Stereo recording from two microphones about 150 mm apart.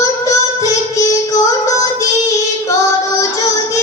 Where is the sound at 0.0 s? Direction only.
20° left (ahead or behind).